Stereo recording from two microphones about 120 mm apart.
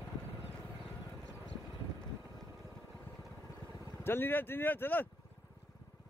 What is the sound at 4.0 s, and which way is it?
Speech, 20° left (ahead or behind).